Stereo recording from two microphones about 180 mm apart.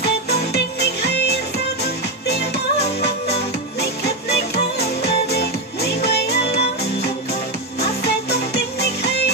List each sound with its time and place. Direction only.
0.0 s music: 65° left (ahead or behind)
4.0 s music: 65° left (ahead or behind)
8.0 s music: 65° left (ahead or behind)